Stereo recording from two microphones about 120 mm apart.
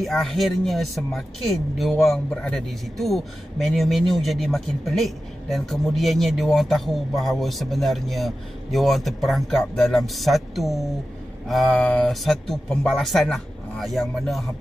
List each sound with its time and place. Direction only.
0.0 s speech: centre (ahead or behind)
11.6 s speech: 10° left (ahead or behind)